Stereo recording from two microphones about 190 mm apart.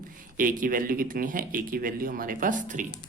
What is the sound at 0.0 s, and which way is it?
Speech, 45° right (ahead or behind).